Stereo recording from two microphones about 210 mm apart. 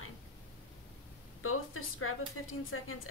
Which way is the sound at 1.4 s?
85° left.